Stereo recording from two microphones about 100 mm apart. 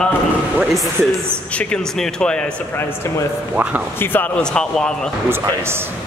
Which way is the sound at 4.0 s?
20° left (ahead or behind).